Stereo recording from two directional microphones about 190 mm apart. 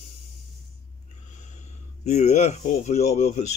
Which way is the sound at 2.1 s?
35° left (ahead or behind).